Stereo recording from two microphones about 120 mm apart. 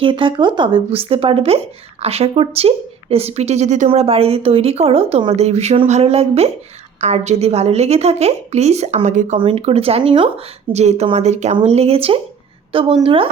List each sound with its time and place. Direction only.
0.0 s speech: 45° right (ahead or behind); by 3.8 s 75° right (ahead or behind)
3.8 s speech: 55° right (ahead or behind); by 9.4 s 85° right
9.5 s a woman's voice: 60° right (ahead or behind)